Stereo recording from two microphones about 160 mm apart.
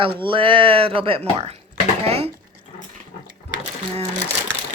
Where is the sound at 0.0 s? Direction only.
30° right (ahead or behind).